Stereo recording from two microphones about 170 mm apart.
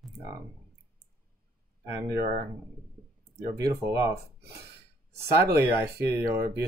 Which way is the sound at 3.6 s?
20° right (ahead or behind).